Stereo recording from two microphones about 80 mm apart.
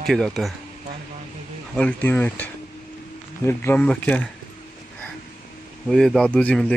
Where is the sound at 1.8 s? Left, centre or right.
Centre.